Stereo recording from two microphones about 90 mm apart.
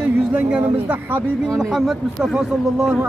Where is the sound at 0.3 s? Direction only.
15° right (ahead or behind).